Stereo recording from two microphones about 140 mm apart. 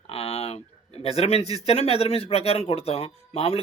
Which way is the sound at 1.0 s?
45° left (ahead or behind).